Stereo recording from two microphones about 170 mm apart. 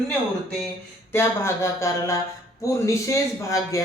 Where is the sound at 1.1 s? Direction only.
15° left (ahead or behind).